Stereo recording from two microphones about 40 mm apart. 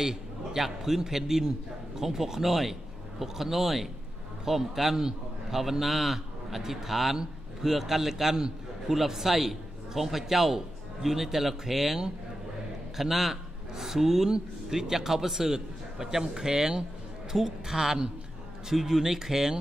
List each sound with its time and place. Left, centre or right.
0.0 s a man's voice: centre